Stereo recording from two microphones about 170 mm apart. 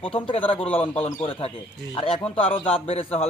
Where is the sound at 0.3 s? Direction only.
30° left (ahead or behind).